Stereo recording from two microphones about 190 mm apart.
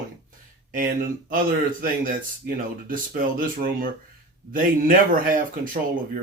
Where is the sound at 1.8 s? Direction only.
45° right (ahead or behind).